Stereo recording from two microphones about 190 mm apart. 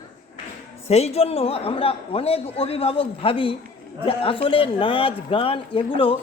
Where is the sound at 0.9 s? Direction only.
35° left (ahead or behind).